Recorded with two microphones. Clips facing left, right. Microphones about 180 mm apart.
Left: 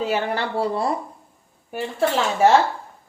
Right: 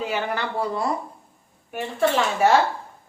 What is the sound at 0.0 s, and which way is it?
Speech, 30° left (ahead or behind).